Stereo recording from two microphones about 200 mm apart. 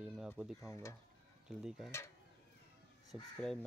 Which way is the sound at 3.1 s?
Centre (ahead or behind).